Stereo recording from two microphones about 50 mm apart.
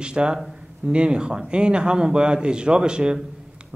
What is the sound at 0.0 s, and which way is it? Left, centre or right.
Speech, centre.